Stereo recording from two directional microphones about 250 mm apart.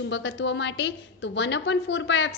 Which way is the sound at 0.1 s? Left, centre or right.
Left.